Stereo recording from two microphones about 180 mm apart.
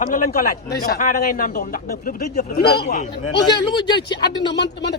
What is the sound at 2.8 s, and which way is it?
Speech, 40° left (ahead or behind).